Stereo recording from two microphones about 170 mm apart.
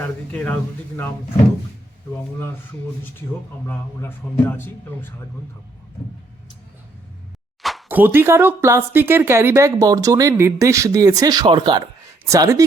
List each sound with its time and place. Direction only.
0.0 s a man's voice: 10° left (ahead or behind)
3.7 s a man's voice: 10° left (ahead or behind)
7.9 s speech: 10° right (ahead or behind)